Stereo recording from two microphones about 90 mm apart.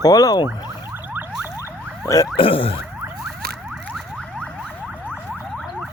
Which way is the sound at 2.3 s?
85° left.